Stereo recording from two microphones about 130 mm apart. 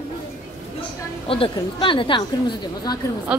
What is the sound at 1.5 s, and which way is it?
Speech, 40° left (ahead or behind).